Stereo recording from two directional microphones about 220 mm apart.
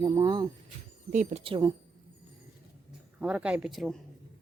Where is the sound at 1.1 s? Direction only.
35° right (ahead or behind).